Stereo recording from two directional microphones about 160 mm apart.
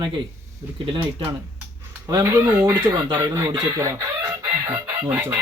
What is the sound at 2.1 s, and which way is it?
Speech, 20° right (ahead or behind).